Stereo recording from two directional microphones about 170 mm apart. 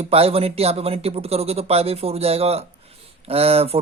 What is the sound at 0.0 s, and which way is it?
Speech, 35° right (ahead or behind).